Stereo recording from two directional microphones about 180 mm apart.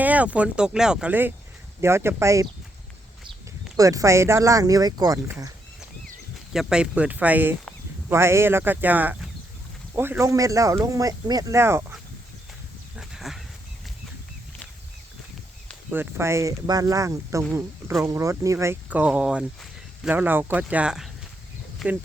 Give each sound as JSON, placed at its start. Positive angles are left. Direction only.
{"t": 0.0, "sound": "speech", "side_deg": -10}
{"t": 3.8, "sound": "speech", "side_deg": -20}
{"t": 6.5, "sound": "speech", "side_deg": -5}
{"t": 13.0, "sound": "a sound", "side_deg": 0}
{"t": 15.9, "sound": "speech", "side_deg": -10}